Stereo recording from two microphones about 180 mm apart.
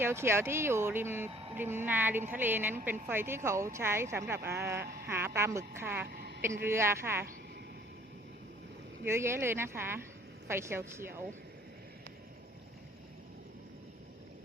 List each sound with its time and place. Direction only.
0.0 s speech: 15° right (ahead or behind)
1.3 s speech: 30° right (ahead or behind)
1.5 s speech: 10° right (ahead or behind)
4.8 s speech: 60° right (ahead or behind)
5.0 s speech: 15° right (ahead or behind)
6.1 s a sound: 60° right (ahead or behind)
6.4 s speech: 15° right (ahead or behind)
9.0 s speech: 15° right (ahead or behind)